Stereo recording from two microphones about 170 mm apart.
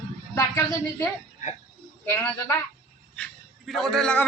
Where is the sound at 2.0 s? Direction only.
15° left (ahead or behind).